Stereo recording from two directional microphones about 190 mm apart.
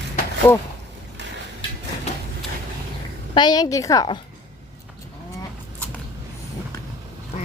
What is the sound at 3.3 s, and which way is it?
Speech, 20° left (ahead or behind).